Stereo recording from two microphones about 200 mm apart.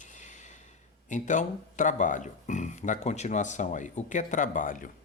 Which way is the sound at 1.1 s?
40° left (ahead or behind).